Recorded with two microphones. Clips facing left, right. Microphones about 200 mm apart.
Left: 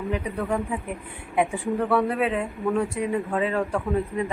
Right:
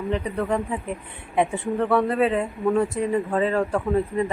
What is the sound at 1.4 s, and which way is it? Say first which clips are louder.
Speech: right 1 dB; 5° left (ahead or behind).